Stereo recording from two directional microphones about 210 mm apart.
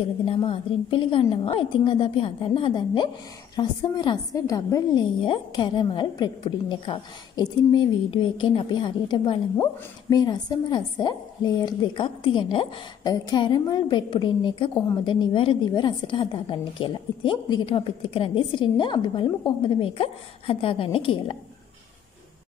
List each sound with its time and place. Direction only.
0.2 s a woman's voice: 25° left (ahead or behind)